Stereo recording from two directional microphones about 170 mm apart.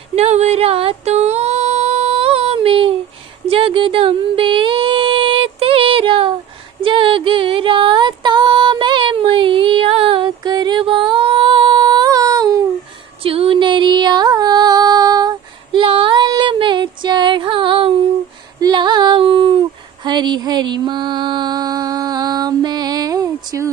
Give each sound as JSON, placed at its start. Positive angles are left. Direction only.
{"t": 0.1, "sound": "music", "side_deg": -40}
{"t": 3.4, "sound": "a sound", "side_deg": -30}
{"t": 6.8, "sound": "female singing", "side_deg": -30}
{"t": 13.2, "sound": "music", "side_deg": -35}
{"t": 18.6, "sound": "female singing", "side_deg": -25}